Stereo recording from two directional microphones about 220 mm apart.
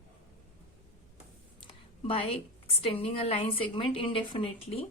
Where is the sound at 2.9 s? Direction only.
25° left (ahead or behind).